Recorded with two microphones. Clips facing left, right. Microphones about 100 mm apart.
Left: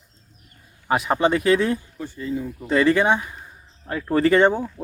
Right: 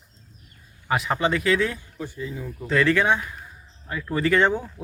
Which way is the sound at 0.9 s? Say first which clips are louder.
Left 4 dB; 30° left (ahead or behind).